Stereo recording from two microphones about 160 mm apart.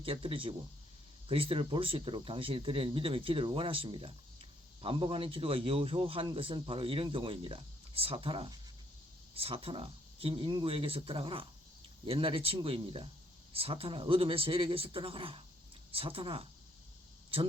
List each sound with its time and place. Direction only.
0.0 s a man's voice: 35° right (ahead or behind)